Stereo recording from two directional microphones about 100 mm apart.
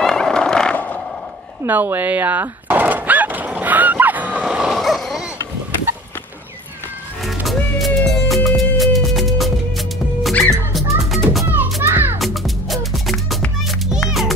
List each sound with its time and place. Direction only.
0.0 s horse: 5° left (ahead or behind)
1.6 s speech: 20° right (ahead or behind)
2.7 s a sound: 15° right (ahead or behind); by 5.2 s centre (ahead or behind)
7.4 s music: centre (ahead or behind)
11.4 s music: 20° right (ahead or behind)
12.2 s music: centre (ahead or behind)